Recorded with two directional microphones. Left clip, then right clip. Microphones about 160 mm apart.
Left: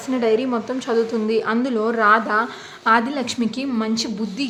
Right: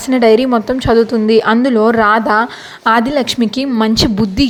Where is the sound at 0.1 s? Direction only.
45° right (ahead or behind).